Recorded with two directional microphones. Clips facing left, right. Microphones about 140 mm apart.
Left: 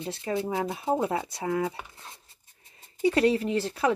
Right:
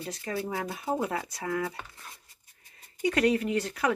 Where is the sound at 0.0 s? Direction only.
25° left (ahead or behind).